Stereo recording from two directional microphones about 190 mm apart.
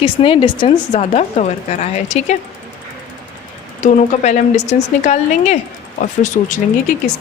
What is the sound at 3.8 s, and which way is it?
A woman's voice, 40° left (ahead or behind).